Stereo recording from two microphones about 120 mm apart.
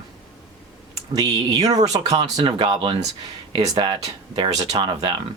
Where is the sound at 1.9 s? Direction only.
45° right (ahead or behind).